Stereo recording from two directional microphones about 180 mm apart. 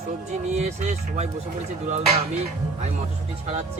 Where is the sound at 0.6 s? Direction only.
40° right (ahead or behind).